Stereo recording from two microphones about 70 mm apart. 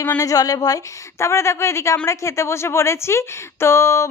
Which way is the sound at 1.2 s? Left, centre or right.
Left.